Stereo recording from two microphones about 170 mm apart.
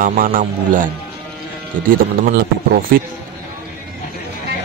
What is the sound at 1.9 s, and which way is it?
Speech, 65° right (ahead or behind).